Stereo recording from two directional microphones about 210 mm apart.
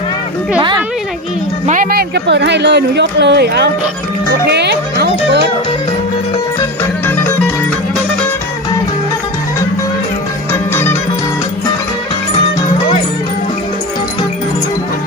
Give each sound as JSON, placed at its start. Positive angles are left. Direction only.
{"t": 1.6, "sound": "speech", "side_deg": -40}